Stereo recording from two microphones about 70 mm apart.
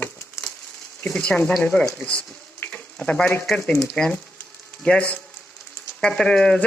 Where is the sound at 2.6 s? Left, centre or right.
Left.